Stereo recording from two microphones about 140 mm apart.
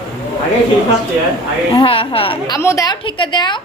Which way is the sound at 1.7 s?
40° left (ahead or behind).